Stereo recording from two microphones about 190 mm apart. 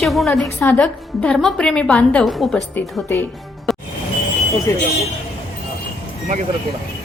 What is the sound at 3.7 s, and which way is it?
Music, centre (ahead or behind).